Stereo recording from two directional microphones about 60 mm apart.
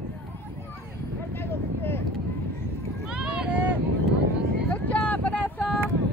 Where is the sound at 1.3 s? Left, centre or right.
Left.